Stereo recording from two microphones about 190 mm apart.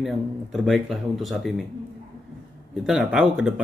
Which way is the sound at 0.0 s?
Centre (ahead or behind).